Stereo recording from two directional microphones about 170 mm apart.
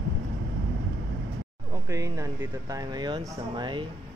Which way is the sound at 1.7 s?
20° right (ahead or behind).